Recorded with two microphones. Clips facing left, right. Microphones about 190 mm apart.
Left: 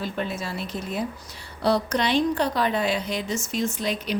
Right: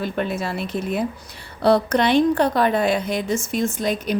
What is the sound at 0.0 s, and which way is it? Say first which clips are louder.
A woman's voice: right 5 dB; 60° right (ahead or behind).